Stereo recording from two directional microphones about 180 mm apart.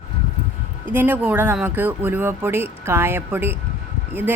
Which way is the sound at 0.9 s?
10° right (ahead or behind).